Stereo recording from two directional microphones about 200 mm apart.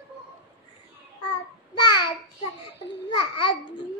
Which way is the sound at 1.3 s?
20° left (ahead or behind).